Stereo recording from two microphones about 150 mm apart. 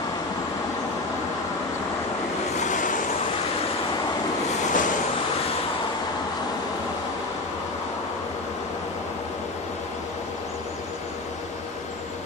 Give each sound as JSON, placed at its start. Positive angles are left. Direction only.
{"t": 2.5, "sound": "waves", "side_deg": 55}
{"t": 4.6, "sound": "vehicle", "side_deg": 60}